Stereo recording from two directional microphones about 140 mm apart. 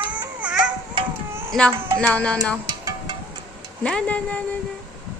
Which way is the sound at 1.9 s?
10° left (ahead or behind).